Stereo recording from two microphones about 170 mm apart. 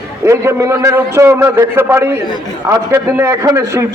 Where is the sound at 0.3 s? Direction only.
15° right (ahead or behind).